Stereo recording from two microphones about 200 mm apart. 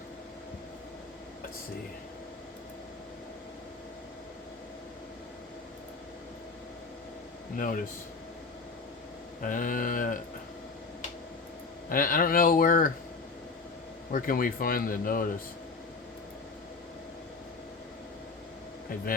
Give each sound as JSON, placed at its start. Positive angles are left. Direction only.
{"t": 7.5, "sound": "a man's voice", "side_deg": 40}
{"t": 9.4, "sound": "a sound", "side_deg": 40}
{"t": 11.9, "sound": "a man's voice", "side_deg": 45}
{"t": 14.1, "sound": "a man's voice", "side_deg": 45}